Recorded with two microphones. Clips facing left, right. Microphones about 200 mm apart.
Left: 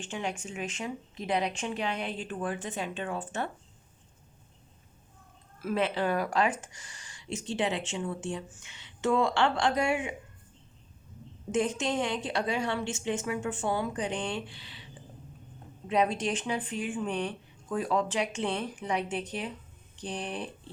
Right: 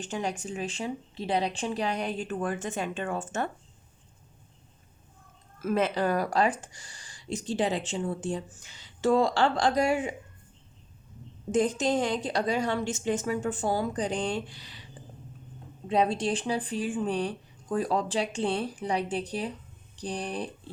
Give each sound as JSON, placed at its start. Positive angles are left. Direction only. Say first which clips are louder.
{"t": 0.0, "sound": "speech", "louder": "right 3 dB", "side_deg": -40}
{"t": 5.5, "sound": "speech", "louder": "right 3 dB", "side_deg": -45}
{"t": 11.5, "sound": "speech", "louder": "right 3 dB", "side_deg": -35}
{"t": 15.9, "sound": "speech", "louder": "right 2 dB", "side_deg": -35}